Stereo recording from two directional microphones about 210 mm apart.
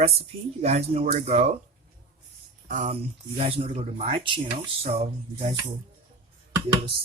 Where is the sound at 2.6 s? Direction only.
35° right (ahead or behind).